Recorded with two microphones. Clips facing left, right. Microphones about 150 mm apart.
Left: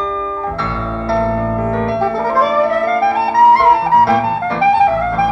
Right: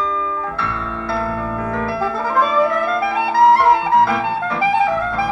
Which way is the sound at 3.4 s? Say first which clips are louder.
Left 2 dB; 30° left (ahead or behind).